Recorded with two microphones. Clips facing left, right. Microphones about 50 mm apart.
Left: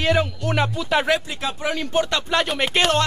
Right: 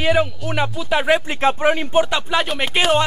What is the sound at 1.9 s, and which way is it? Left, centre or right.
Speech, right.